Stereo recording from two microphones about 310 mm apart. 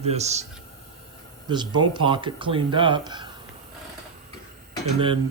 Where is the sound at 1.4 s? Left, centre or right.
Centre.